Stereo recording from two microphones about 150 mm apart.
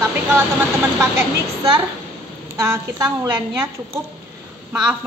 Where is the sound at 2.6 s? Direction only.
20° right (ahead or behind).